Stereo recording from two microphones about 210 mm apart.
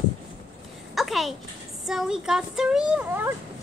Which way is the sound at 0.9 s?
Centre (ahead or behind).